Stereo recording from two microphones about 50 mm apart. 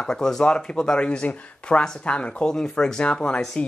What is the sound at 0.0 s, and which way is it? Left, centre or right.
Speech, centre.